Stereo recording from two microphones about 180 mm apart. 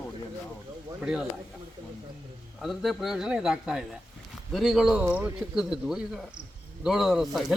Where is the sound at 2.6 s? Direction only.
Centre (ahead or behind).